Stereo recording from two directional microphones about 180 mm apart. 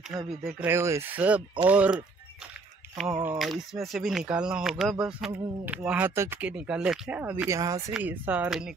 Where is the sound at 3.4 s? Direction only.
Centre (ahead or behind).